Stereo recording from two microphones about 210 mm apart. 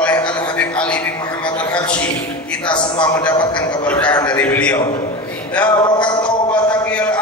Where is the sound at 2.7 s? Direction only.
20° left (ahead or behind).